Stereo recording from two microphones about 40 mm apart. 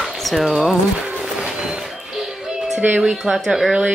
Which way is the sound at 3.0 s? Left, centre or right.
Centre.